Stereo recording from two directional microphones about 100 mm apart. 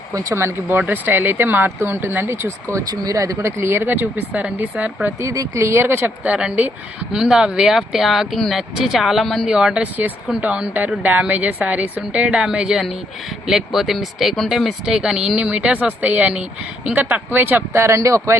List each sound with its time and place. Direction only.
0.1 s speech: 30° right (ahead or behind)
2.7 s speech: 40° right (ahead or behind); by 5.1 s 10° right (ahead or behind)
5.2 s speech: 30° right (ahead or behind)
6.3 s speech: 10° right (ahead or behind); by 18.3 s 30° right (ahead or behind)